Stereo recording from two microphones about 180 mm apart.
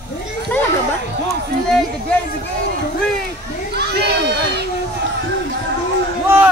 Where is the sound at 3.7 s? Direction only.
65° right (ahead or behind).